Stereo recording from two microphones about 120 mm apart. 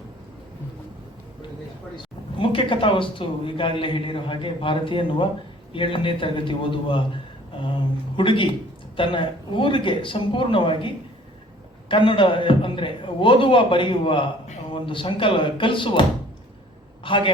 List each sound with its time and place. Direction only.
2.0 s speech: 45° left (ahead or behind)
8.1 s a man's voice: 45° left (ahead or behind)